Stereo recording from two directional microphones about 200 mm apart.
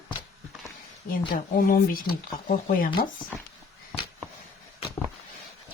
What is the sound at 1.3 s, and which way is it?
Speech, 45° left (ahead or behind).